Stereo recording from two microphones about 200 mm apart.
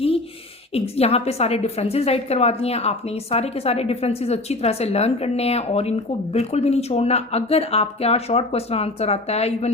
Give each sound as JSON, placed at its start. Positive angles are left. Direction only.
{"t": 0.7, "sound": "speech", "side_deg": 30}